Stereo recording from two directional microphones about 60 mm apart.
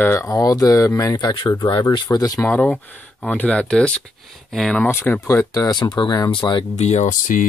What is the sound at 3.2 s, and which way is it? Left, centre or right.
Speech, left.